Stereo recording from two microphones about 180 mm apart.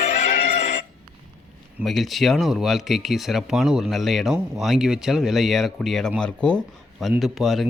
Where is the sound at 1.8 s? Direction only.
Centre (ahead or behind).